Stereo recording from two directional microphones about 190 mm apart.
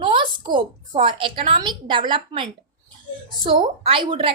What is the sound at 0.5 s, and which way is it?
A woman's voice, 25° right (ahead or behind).